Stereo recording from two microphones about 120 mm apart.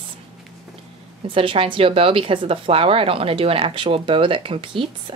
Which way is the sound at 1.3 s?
45° right (ahead or behind).